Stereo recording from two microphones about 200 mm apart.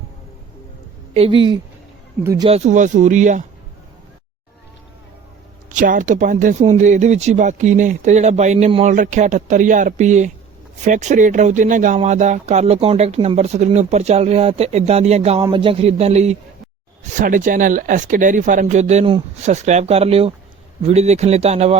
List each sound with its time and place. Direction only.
1.1 s a woman's voice: 25° right (ahead or behind)
2.5 s speech: 35° right (ahead or behind)
5.7 s speech: 40° right (ahead or behind)